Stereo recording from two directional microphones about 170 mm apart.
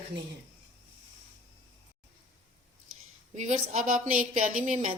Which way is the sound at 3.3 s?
40° right (ahead or behind).